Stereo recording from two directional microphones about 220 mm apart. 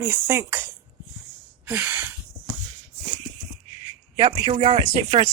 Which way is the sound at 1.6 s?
5° right (ahead or behind).